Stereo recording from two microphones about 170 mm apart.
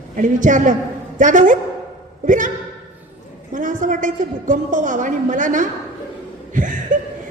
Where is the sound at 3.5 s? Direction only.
50° right (ahead or behind).